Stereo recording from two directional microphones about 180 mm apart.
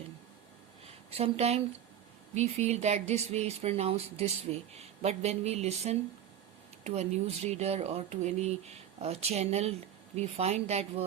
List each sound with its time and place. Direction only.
1.1 s speech: 35° right (ahead or behind)